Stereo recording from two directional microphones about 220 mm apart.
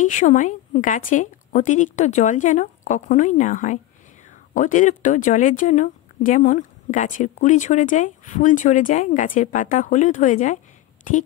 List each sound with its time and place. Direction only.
0.0 s speech: 35° left (ahead or behind)